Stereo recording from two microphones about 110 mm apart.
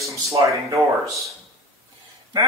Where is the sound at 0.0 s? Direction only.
30° right (ahead or behind).